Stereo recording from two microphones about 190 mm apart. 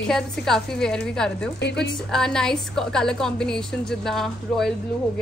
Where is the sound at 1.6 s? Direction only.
65° left (ahead or behind).